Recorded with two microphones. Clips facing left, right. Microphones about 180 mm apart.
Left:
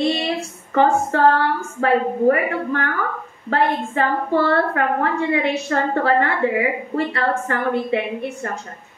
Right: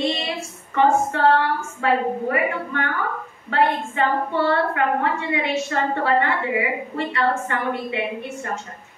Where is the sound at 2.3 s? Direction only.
40° left (ahead or behind).